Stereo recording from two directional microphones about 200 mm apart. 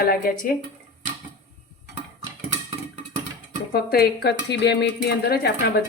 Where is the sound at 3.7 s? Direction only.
50° left (ahead or behind).